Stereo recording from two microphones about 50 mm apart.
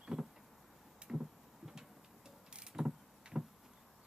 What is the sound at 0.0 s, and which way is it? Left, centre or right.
Power windows, centre.